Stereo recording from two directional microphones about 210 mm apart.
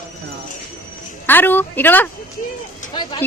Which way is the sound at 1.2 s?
10° left (ahead or behind).